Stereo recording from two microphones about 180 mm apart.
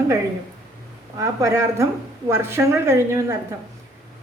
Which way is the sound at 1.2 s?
15° right (ahead or behind).